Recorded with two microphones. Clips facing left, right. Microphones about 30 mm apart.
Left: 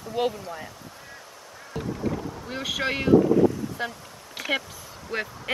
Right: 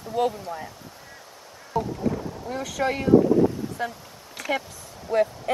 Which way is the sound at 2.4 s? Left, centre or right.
Left.